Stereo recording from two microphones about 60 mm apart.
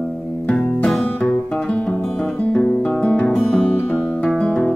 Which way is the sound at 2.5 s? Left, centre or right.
Left.